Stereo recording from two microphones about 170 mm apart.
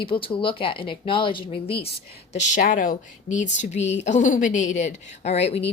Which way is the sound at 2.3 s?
45° left (ahead or behind).